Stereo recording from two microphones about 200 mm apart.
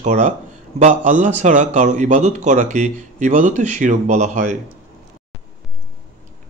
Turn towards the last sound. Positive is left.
turn(degrees=-35)  # may be behind; listen again after turning